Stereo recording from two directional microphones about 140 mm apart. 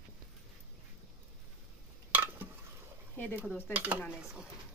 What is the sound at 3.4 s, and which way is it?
Speech, 15° left (ahead or behind).